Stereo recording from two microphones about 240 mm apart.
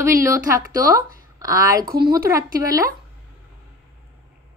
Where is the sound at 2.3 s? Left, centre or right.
Centre.